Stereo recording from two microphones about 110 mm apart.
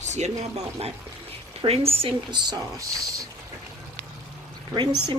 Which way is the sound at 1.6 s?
65° right (ahead or behind).